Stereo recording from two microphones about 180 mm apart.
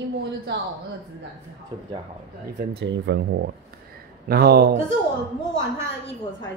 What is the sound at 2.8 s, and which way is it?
Speech, 85° right.